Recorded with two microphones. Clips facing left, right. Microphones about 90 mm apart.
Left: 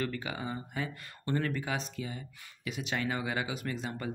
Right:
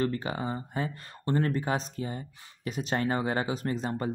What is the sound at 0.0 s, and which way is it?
Speech, 35° right (ahead or behind).